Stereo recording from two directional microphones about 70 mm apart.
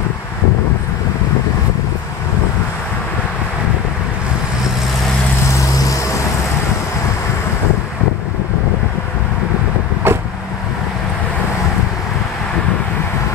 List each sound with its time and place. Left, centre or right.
10.0 s vehicle: right